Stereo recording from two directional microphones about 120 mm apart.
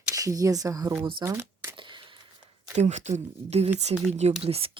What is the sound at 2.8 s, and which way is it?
Speech, 75° right (ahead or behind).